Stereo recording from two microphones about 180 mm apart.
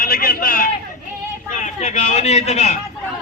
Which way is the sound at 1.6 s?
40° left (ahead or behind).